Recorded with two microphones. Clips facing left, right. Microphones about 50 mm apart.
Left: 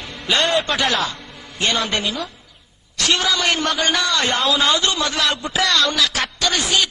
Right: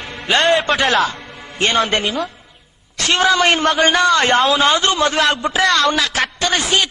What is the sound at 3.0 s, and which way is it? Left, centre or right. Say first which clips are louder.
A man's voice: right 5 dB; right.